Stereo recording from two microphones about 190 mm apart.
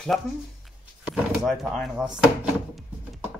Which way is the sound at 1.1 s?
Centre (ahead or behind).